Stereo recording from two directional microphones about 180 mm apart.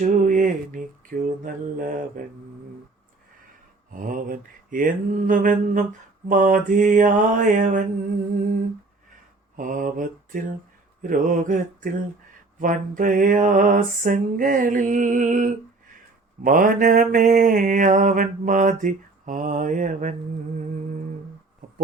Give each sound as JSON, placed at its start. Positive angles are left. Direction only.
{"t": 0.2, "sound": "mantra", "side_deg": -45}
{"t": 3.9, "sound": "mantra", "side_deg": -50}
{"t": 9.6, "sound": "mantra", "side_deg": -45}